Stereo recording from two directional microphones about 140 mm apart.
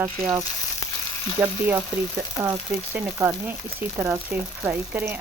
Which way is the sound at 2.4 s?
15° right (ahead or behind).